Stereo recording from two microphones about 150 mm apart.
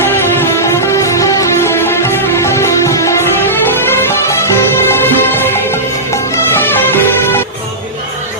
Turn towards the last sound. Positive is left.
turn(degrees=15)  # may be behind; listen again after turning